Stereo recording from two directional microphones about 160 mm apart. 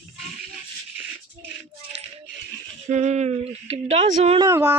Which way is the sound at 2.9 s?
50° right (ahead or behind).